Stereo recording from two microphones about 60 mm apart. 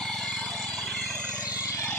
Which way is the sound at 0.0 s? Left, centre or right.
Centre.